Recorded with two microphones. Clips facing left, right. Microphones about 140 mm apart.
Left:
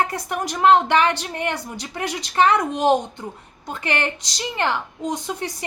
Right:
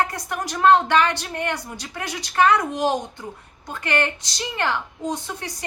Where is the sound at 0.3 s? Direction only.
15° left (ahead or behind).